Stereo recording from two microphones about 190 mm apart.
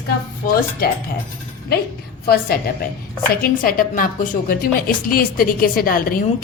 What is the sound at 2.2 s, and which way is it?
A woman's voice, 55° left (ahead or behind).